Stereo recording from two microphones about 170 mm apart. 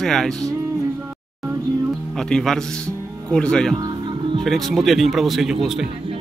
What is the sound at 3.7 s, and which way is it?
Music, 25° right (ahead or behind).